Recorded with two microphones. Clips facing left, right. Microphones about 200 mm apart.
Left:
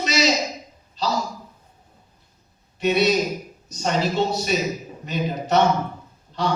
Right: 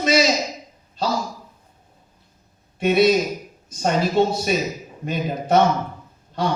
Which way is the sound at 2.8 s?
50° right (ahead or behind).